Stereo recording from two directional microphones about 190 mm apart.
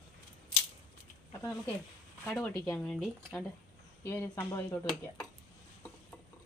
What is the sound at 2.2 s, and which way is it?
Speech, 5° left (ahead or behind).